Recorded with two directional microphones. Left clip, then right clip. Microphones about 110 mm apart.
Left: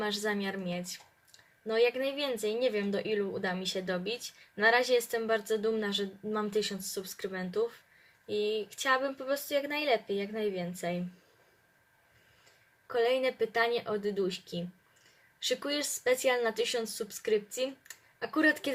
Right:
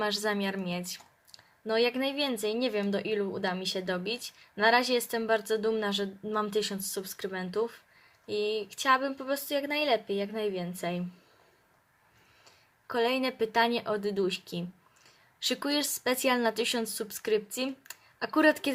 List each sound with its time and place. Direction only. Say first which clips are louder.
0.0 s speech: right 3 dB; 45° right (ahead or behind)
12.9 s speech: even; 50° right (ahead or behind)